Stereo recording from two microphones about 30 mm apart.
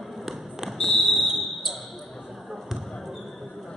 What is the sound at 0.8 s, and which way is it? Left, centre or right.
Fire alarm, centre.